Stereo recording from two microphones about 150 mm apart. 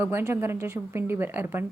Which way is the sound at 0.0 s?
15° right (ahead or behind).